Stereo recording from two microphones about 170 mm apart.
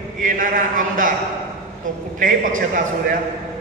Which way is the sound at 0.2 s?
50° right (ahead or behind).